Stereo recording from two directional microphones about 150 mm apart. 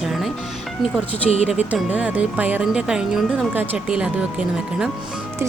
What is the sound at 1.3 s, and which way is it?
Speech, 45° left (ahead or behind).